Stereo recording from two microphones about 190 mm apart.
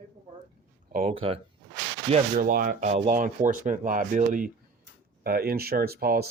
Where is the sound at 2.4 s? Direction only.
50° right (ahead or behind).